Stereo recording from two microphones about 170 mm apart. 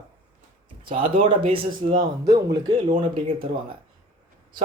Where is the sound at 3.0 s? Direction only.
30° right (ahead or behind).